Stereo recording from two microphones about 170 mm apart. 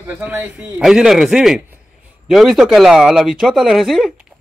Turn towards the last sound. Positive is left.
turn(degrees=0)  # may be behind; listen again after turning